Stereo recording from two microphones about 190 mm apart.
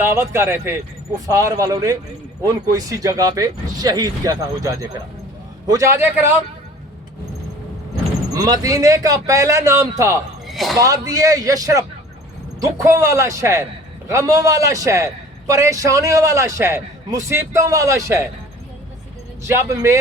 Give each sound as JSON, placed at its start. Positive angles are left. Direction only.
{"t": 0.0, "sound": "a man's voice", "side_deg": -15}
{"t": 8.3, "sound": "a man's voice", "side_deg": -20}
{"t": 10.4, "sound": "a sound", "side_deg": 0}
{"t": 10.8, "sound": "a man's voice", "side_deg": -15}
{"t": 19.4, "sound": "a man's voice", "side_deg": -15}